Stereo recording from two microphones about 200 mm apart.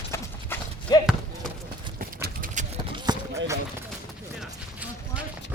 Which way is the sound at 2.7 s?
25° right (ahead or behind).